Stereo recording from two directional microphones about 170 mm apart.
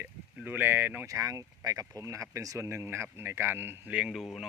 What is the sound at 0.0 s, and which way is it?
Speech, 10° right (ahead or behind).